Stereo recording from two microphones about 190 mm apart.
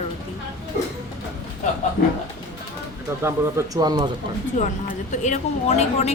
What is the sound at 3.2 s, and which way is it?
Speech, 15° right (ahead or behind).